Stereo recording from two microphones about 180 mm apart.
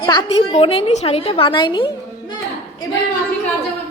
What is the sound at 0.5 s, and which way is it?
A woman's voice, 30° left (ahead or behind).